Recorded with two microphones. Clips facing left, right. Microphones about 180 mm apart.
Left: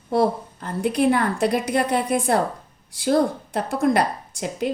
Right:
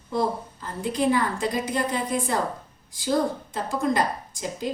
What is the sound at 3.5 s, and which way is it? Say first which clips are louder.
A woman's voice: left 5 dB; 70° left (ahead or behind).